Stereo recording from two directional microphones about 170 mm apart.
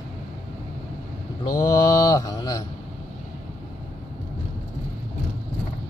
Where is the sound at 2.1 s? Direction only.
25° left (ahead or behind).